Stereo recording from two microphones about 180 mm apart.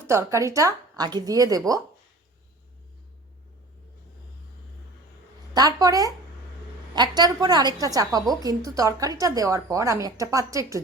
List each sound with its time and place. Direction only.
0.1 s a woman's voice: 15° right (ahead or behind)
5.5 s a woman's voice: 20° right (ahead or behind)